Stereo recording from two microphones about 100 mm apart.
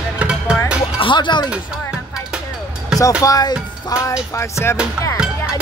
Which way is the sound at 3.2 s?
40° left (ahead or behind).